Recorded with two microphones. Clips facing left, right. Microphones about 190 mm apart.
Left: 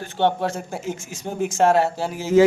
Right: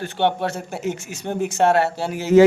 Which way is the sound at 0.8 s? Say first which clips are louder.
Right 3 dB; 65° right (ahead or behind).